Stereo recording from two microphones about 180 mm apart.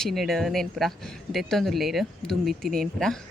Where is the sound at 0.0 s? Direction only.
Centre (ahead or behind).